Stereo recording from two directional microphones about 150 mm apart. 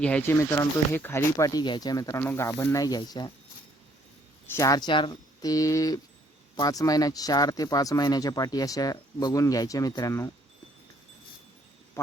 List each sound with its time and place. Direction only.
0.0 s speech: 10° left (ahead or behind); by 3.3 s 30° left (ahead or behind)
4.5 s speech: 25° left (ahead or behind)